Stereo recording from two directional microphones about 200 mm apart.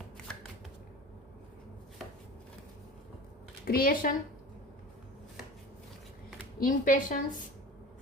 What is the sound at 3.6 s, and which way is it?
Speech, 45° left (ahead or behind).